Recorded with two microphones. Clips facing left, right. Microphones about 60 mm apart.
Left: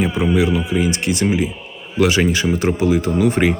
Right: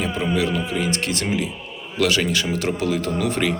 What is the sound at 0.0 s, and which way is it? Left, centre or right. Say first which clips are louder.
A man's voice: left 5 dB; centre.